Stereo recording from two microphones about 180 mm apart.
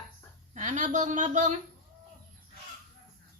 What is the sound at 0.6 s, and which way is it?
Speech, 45° right (ahead or behind).